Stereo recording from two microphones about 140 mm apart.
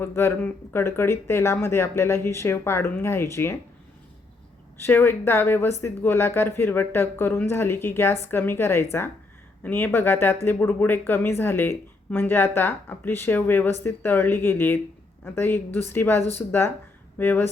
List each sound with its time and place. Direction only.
0.0 s speech: 15° left (ahead or behind)
4.8 s speech: 15° left (ahead or behind)